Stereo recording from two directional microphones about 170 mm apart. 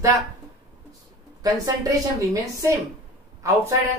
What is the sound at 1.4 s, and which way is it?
Speech, 20° right (ahead or behind).